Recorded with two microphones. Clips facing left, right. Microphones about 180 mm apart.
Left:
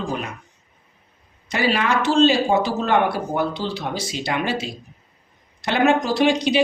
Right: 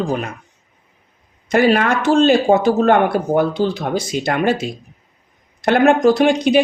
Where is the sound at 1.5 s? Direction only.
50° right (ahead or behind).